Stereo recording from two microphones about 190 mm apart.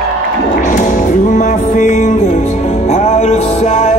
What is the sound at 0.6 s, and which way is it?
Music, 40° left (ahead or behind).